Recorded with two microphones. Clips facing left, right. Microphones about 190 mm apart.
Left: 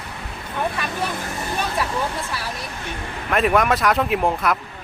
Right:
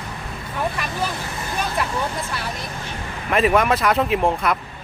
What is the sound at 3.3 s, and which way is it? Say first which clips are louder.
Speech: right 1 dB; centre (ahead or behind).